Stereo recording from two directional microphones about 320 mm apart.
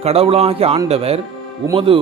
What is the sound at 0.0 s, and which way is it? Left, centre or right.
A man's voice, centre.